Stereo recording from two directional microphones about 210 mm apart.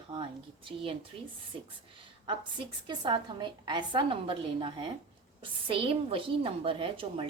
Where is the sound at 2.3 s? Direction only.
25° right (ahead or behind).